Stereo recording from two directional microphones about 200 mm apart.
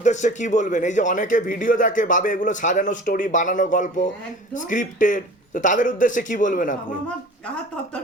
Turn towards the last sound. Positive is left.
turn(degrees=40)  # may be behind; listen again after turning